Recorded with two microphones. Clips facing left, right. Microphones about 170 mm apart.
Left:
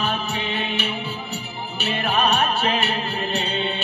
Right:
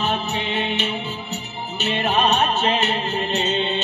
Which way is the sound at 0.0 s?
20° right (ahead or behind).